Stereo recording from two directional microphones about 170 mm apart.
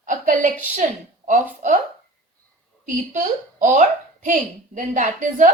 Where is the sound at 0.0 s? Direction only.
50° right (ahead or behind).